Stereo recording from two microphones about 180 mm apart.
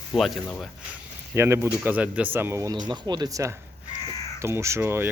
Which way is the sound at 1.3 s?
15° right (ahead or behind).